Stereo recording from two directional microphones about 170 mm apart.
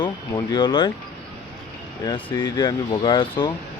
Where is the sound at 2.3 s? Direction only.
25° left (ahead or behind).